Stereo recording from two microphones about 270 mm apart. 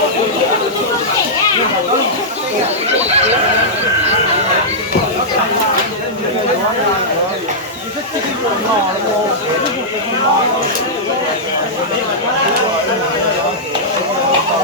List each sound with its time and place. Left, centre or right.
2.9 s neigh: right